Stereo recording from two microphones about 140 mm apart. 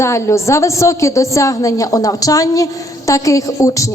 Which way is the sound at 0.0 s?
20° left (ahead or behind).